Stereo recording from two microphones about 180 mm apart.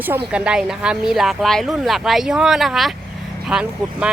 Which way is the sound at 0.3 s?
5° right (ahead or behind).